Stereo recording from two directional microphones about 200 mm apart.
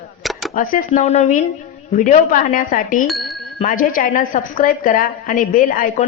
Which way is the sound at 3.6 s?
45° left (ahead or behind).